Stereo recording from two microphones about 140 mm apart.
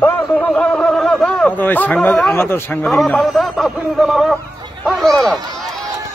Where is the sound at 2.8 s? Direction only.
Centre (ahead or behind).